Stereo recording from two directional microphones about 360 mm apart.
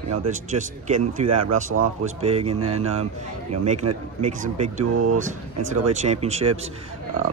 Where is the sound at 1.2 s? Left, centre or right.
Right.